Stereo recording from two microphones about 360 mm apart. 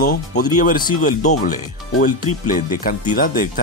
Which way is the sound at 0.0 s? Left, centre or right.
Left.